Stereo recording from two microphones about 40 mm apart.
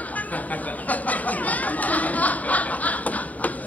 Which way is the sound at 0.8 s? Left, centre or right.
Left.